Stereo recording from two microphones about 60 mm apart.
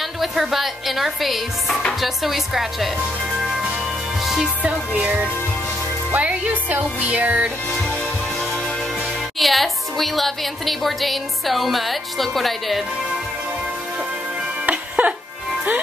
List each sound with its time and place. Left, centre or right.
0.2 s a woman's voice: centre
3.3 s music: centre
4.6 s speech: right
9.4 s a woman's voice: centre
14.7 s music: right